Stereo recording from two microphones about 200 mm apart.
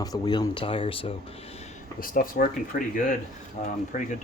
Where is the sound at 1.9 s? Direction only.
45° left (ahead or behind).